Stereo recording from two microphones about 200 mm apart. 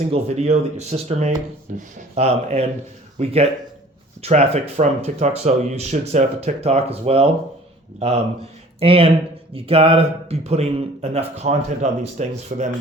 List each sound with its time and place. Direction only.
0.1 s a man's voice: 35° right (ahead or behind)